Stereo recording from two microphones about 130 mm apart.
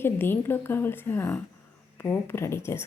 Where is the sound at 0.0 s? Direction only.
15° left (ahead or behind).